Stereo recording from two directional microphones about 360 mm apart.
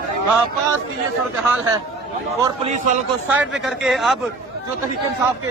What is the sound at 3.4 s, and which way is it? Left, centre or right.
Speech, centre.